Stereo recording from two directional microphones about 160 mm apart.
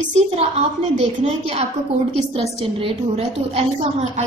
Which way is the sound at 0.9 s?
40° right (ahead or behind).